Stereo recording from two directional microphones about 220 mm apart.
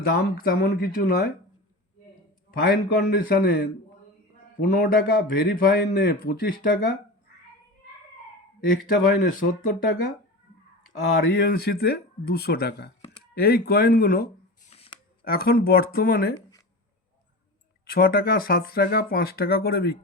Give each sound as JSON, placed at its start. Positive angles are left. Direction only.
{"t": 0.1, "sound": "speech", "side_deg": 45}
{"t": 2.5, "sound": "a man's voice", "side_deg": 45}
{"t": 8.9, "sound": "a man's voice", "side_deg": 40}
{"t": 11.2, "sound": "speech", "side_deg": 45}
{"t": 14.7, "sound": "shuffling cards", "side_deg": 25}
{"t": 15.2, "sound": "speech", "side_deg": 45}
{"t": 17.8, "sound": "speech", "side_deg": 45}